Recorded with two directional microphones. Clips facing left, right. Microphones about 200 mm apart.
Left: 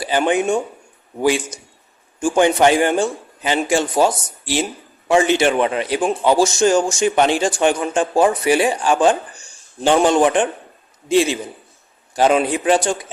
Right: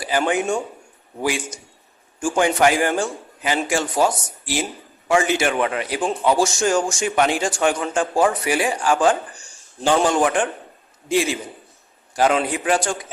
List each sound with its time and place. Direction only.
0.0 s a man's voice: 25° left (ahead or behind)
2.2 s a man's voice: 25° left (ahead or behind)